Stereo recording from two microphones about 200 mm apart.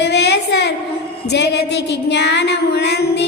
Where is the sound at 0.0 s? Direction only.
55° left (ahead or behind).